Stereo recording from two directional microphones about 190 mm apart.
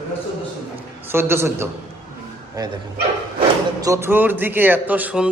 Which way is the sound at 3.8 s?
15° right (ahead or behind).